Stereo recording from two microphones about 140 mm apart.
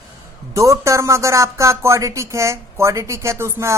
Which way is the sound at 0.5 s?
20° right (ahead or behind).